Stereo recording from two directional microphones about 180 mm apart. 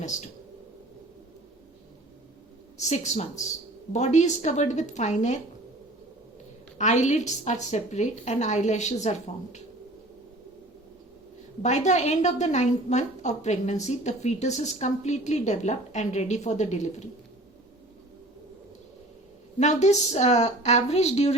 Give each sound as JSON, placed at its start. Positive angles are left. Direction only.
{"t": 0.0, "sound": "speech", "side_deg": 40}
{"t": 2.7, "sound": "a woman's voice", "side_deg": 40}
{"t": 6.7, "sound": "a woman's voice", "side_deg": 40}
{"t": 11.6, "sound": "a woman's voice", "side_deg": 40}
{"t": 19.5, "sound": "a woman's voice", "side_deg": 40}